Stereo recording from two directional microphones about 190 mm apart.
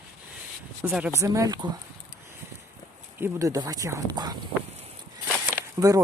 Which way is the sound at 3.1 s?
15° right (ahead or behind).